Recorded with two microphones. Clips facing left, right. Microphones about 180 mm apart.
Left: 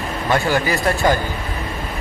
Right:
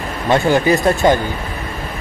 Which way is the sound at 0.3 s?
20° right (ahead or behind).